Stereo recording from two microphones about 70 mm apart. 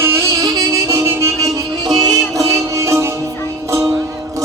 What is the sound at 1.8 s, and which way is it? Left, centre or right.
Music, right.